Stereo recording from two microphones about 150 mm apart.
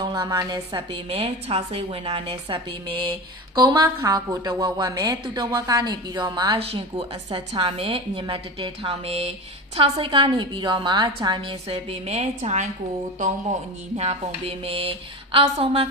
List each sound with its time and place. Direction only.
0.0 s a woman's voice: 30° right (ahead or behind)